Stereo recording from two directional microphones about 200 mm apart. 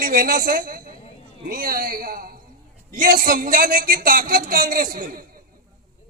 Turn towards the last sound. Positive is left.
turn(degrees=-45)  # may be behind; listen again after turning